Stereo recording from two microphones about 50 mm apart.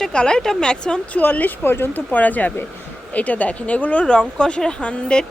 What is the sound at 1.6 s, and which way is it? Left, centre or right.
Speech, left.